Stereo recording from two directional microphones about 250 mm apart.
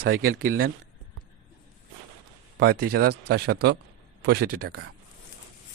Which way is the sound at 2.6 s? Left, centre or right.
Right.